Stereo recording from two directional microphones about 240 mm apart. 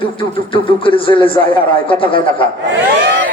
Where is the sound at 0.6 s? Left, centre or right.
Left.